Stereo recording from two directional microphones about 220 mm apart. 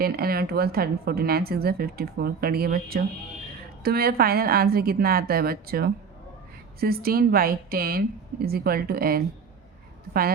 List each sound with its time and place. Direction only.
0.0 s a woman's voice: 45° right (ahead or behind)